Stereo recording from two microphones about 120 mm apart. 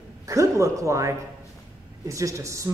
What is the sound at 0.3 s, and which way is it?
A woman's voice, 25° right (ahead or behind).